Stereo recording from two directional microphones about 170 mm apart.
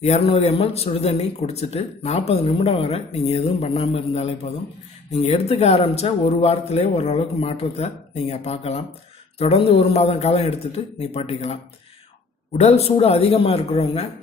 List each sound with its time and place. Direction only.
0.0 s speech: 35° left (ahead or behind)
12.5 s speech: 40° left (ahead or behind)